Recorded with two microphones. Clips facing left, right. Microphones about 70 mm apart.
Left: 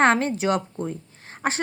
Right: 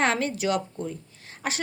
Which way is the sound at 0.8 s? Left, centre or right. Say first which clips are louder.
Left 3 dB; left.